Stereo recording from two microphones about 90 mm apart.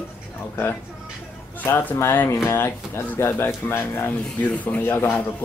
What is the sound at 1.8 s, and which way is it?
Speech, 20° left (ahead or behind).